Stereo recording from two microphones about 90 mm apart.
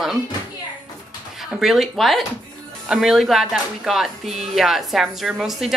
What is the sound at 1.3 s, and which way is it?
Speech, 5° right (ahead or behind).